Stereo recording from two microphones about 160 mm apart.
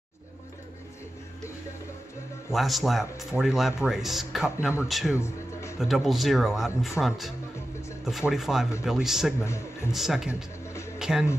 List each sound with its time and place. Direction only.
2.5 s speech: centre (ahead or behind)
5.1 s music: 15° left (ahead or behind)
5.8 s speech: centre (ahead or behind)
9.4 s a man's voice: 15° left (ahead or behind)
9.9 s speech: 5° right (ahead or behind)